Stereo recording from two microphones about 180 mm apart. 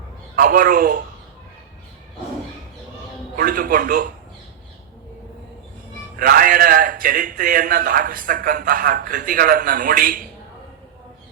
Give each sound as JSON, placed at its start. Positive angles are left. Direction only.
{"t": 0.3, "sound": "a man's voice", "side_deg": -50}
{"t": 3.3, "sound": "a man's voice", "side_deg": -50}
{"t": 6.1, "sound": "a man's voice", "side_deg": -50}